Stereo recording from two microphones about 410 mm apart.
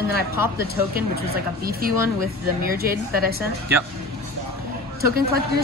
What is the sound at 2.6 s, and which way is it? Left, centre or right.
Speech, right.